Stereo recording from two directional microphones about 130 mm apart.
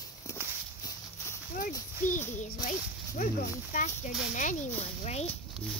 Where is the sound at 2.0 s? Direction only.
90° left.